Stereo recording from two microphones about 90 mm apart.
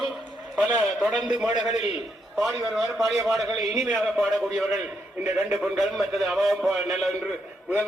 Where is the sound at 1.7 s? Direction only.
Centre (ahead or behind).